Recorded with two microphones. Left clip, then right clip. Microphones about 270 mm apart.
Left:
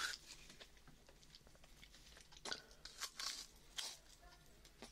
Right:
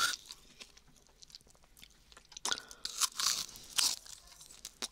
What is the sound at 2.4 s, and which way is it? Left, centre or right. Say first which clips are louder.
Crunch: right 12 dB; right.